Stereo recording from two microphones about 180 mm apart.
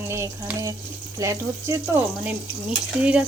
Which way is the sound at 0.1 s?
15° right (ahead or behind).